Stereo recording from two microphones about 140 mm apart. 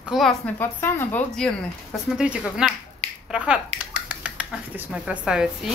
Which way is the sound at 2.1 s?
10° right (ahead or behind).